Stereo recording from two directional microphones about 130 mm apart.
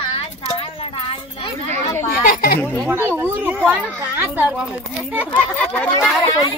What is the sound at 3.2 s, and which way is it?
Speech, 15° right (ahead or behind).